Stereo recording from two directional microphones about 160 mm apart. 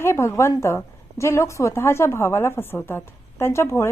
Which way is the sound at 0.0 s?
15° left (ahead or behind).